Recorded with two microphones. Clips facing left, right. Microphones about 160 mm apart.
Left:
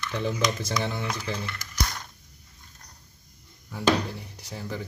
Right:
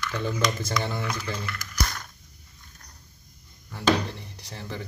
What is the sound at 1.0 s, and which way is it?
Speech, 25° left (ahead or behind).